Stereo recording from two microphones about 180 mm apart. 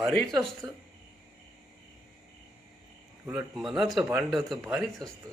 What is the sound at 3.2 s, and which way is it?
Speech, 5° right (ahead or behind).